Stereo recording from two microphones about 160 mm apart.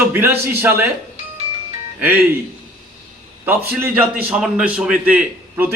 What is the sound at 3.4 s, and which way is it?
A man's voice, 15° right (ahead or behind).